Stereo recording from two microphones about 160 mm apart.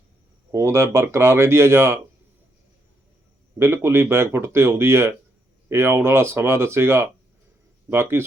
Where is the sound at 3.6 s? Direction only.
15° right (ahead or behind).